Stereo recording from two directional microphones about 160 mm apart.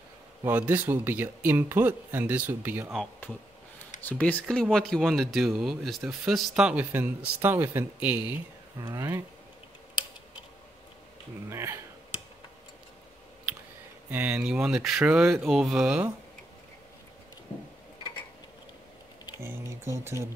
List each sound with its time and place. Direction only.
0.4 s speech: 10° right (ahead or behind)
4.0 s speech: 10° left (ahead or behind); by 9.2 s 20° right (ahead or behind)
11.5 s speech: 15° right (ahead or behind)
14.1 s speech: 10° right (ahead or behind)
19.3 s speech: 15° right (ahead or behind)